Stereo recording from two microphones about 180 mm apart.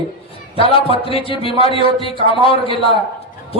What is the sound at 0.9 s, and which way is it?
A man's voice, 30° left (ahead or behind).